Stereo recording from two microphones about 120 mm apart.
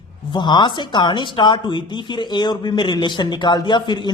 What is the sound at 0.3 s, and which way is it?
A woman's voice, 40° left (ahead or behind).